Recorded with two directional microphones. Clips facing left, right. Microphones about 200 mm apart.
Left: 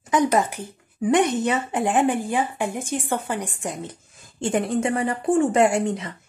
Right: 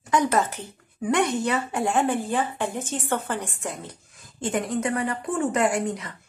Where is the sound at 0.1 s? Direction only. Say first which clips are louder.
Left 2 dB; 15° left (ahead or behind).